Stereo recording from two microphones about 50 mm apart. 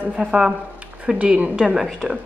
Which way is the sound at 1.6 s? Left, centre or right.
Centre.